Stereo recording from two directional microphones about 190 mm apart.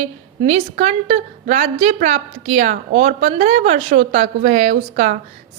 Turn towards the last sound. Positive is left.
turn(degrees=-40)  # may be behind; listen again after turning